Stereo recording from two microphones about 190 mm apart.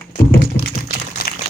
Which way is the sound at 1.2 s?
50° left (ahead or behind).